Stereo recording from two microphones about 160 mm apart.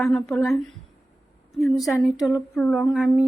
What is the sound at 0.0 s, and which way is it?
Speech, 5° left (ahead or behind).